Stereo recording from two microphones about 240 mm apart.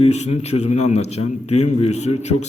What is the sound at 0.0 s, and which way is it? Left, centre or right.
A man's voice, left.